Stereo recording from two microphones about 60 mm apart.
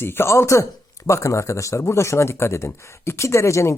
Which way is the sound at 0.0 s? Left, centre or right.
Left.